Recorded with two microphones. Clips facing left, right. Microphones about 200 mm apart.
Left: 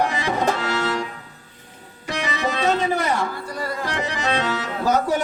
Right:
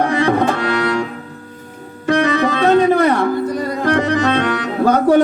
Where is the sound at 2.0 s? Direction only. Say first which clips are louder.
Right 10 dB; 60° right (ahead or behind).